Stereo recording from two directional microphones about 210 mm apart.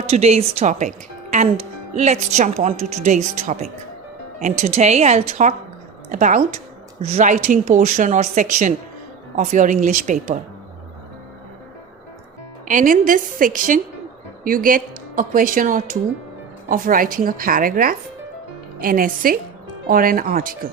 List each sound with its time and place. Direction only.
0.0 s speech: 30° right (ahead or behind)
12.6 s speech: 40° right (ahead or behind)